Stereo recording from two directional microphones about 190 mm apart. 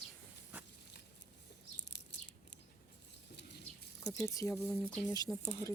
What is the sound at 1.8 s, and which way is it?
Bird, 65° left (ahead or behind).